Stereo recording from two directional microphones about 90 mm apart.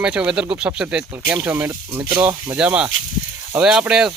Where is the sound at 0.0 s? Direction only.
10° right (ahead or behind).